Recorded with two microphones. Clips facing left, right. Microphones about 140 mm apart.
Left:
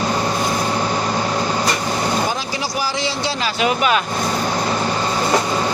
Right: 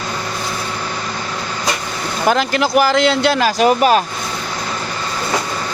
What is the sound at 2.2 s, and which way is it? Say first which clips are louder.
Speech: right 7 dB; 70° right (ahead or behind).